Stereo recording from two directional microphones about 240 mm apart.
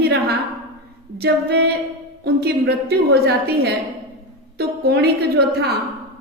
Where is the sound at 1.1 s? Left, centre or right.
Right.